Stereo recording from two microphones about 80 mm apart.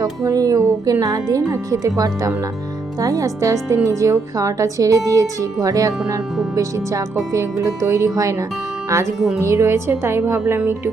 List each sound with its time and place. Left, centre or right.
0.0 s speech: right